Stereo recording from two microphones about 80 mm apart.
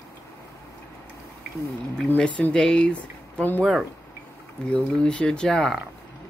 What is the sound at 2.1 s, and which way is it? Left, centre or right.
Speech, centre.